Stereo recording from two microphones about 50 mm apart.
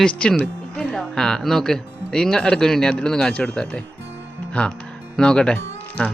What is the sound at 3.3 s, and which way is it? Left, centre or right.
Speech, left.